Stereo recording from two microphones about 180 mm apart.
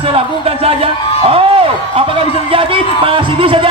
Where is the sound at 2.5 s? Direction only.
30° right (ahead or behind).